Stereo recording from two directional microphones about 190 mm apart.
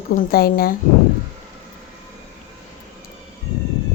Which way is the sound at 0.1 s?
50° left (ahead or behind).